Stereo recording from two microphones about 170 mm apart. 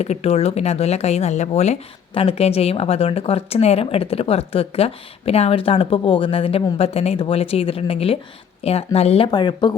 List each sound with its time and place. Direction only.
0.0 s speech: 40° left (ahead or behind)